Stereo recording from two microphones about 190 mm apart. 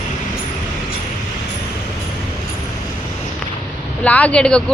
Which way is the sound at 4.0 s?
5° left (ahead or behind).